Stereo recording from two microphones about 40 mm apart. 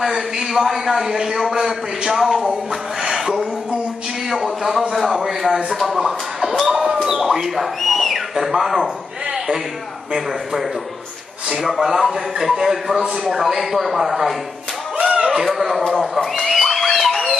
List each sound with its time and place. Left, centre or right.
0.0 s a man's voice: centre
3.0 s a sound: centre
4.3 s speech: centre
6.7 s a sound: centre
8.5 s speech: centre
10.1 s a man's voice: centre
15.0 s a sound: right
15.4 s speech: centre
16.3 s music: centre